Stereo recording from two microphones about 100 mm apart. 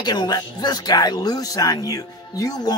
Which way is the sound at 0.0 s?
45° left (ahead or behind).